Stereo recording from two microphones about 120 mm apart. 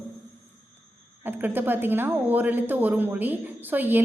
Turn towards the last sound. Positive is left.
turn(degrees=-15)  # may be behind; listen again after turning